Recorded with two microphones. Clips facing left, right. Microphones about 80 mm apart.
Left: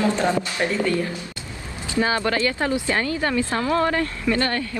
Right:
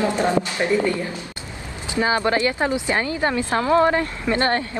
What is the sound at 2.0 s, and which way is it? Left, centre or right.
Speech, right.